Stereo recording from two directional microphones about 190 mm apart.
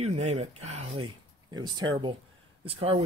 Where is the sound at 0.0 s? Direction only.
35° right (ahead or behind).